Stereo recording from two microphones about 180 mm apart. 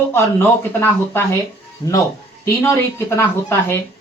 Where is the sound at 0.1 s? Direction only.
10° left (ahead or behind).